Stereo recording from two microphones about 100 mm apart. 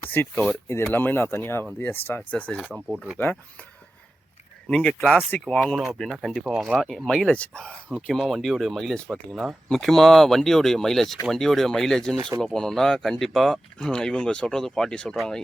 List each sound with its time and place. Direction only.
0.0 s speech: 20° left (ahead or behind)
2.7 s speech: 15° right (ahead or behind)
3.2 s speech: 20° left (ahead or behind)
4.7 s speech: 10° left (ahead or behind)
5.7 s speech: centre (ahead or behind)